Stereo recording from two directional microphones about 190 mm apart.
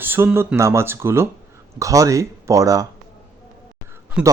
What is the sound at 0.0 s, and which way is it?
Speech, 10° right (ahead or behind).